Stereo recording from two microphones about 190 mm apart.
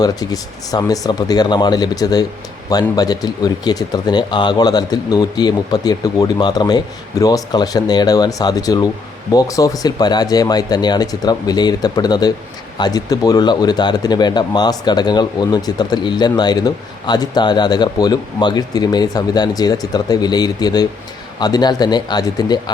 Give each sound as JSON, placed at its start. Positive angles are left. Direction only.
{"t": 0.0, "sound": "speech", "side_deg": 20}